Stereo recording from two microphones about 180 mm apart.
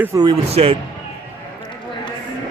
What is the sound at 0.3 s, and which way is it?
Speech, 30° right (ahead or behind).